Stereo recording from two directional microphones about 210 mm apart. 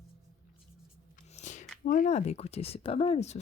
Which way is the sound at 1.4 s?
35° left (ahead or behind).